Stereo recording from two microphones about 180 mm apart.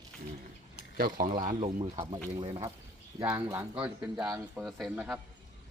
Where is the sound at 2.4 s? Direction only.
30° right (ahead or behind).